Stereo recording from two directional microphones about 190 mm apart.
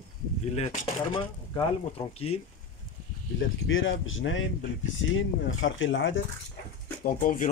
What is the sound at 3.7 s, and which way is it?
Speech, 90° left.